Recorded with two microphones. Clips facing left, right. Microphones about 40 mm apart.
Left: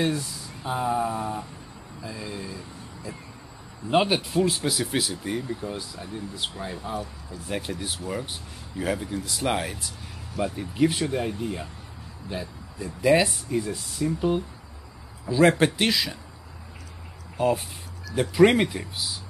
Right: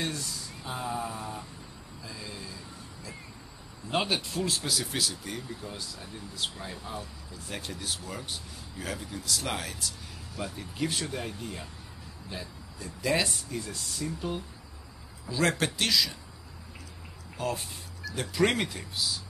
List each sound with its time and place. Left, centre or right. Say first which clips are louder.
0.0 s speech: left 8 dB; centre
17.4 s speech: left 9 dB; left